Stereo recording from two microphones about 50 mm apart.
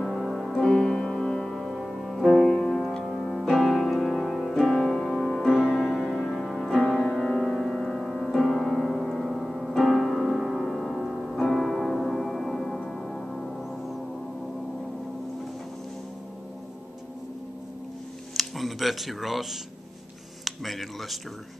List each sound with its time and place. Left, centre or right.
0.0 s music: centre
1.7 s music: centre
3.0 s piano: centre
4.6 s music: centre
7.2 s piano: centre
11.9 s music: centre
18.3 s music: centre
20.4 s speech: centre